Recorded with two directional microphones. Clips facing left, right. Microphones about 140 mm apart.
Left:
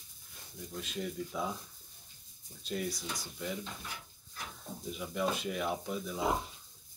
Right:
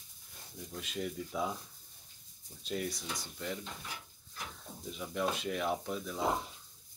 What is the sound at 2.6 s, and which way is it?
Speech, centre (ahead or behind).